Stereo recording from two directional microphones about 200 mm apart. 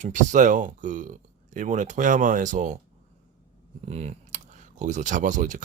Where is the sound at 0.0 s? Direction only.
40° right (ahead or behind).